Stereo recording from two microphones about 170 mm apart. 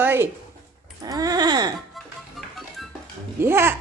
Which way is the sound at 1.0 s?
20° right (ahead or behind).